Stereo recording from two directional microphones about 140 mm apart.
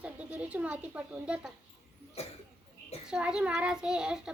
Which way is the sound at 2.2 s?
45° left (ahead or behind).